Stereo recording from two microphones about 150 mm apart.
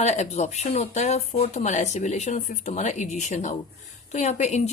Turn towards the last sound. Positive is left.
turn(degrees=50)  # may be behind; listen again after turning